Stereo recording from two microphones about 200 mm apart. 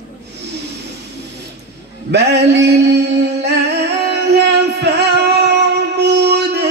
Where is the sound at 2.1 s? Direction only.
55° right (ahead or behind).